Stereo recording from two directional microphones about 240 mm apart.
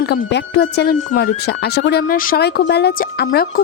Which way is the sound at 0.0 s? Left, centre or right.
Left.